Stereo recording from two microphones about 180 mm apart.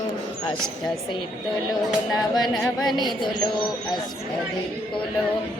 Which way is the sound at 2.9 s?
25° left (ahead or behind).